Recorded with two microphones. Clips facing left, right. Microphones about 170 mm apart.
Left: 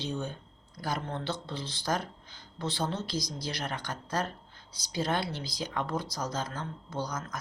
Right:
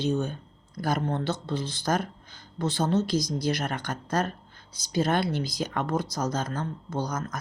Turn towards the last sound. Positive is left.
turn(degrees=-45)  # may be behind; listen again after turning